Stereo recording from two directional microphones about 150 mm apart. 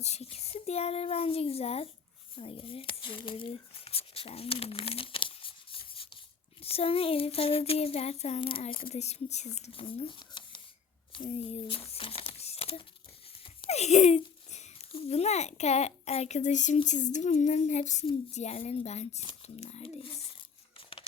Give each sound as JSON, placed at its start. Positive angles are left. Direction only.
{"t": 0.0, "sound": "a child's voice", "side_deg": 45}
{"t": 11.9, "sound": "crumpling", "side_deg": 40}
{"t": 13.7, "sound": "a child's voice", "side_deg": 45}